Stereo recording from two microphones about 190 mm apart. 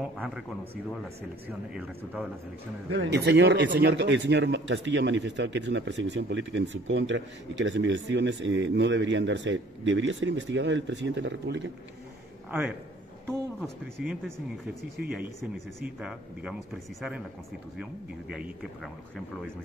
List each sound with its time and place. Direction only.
0.0 s speech: centre (ahead or behind)
2.9 s speech: 65° right (ahead or behind)
12.4 s a man's voice: 10° right (ahead or behind)
13.6 s speech: 5° left (ahead or behind)
15.8 s speech: 5° right (ahead or behind)
18.3 s speech: centre (ahead or behind)